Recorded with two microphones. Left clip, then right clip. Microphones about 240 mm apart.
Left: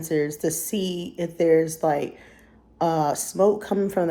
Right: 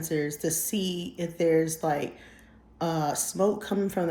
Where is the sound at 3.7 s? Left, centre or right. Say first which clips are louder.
Left 5 dB; left.